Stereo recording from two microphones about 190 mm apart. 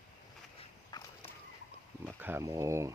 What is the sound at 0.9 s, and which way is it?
Walk, 20° left (ahead or behind).